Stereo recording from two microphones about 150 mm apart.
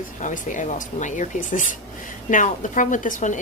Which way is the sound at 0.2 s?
55° left (ahead or behind).